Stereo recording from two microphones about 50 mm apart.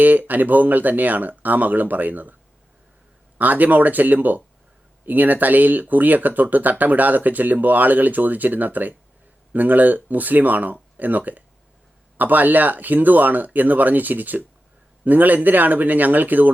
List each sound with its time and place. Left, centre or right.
0.0 s speech: right
3.3 s speech: right